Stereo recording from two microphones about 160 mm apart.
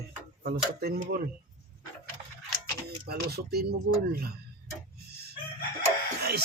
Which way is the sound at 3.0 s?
80° right.